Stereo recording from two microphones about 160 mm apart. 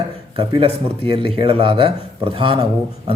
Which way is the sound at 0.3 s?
35° right (ahead or behind).